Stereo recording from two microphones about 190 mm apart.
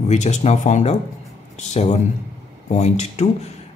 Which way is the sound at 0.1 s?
35° left (ahead or behind).